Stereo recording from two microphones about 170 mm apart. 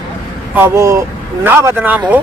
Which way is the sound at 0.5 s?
15° right (ahead or behind).